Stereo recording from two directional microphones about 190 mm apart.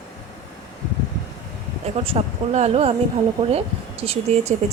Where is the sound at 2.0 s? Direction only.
35° right (ahead or behind).